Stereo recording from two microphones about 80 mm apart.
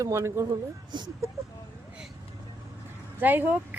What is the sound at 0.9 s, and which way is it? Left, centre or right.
Speech, right.